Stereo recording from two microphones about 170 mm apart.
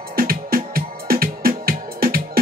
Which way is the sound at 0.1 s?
60° right (ahead or behind).